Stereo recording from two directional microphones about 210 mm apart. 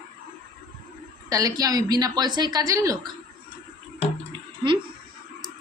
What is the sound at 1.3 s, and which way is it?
Speech, 15° right (ahead or behind).